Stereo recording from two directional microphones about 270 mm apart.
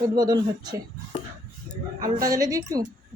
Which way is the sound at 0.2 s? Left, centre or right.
Centre.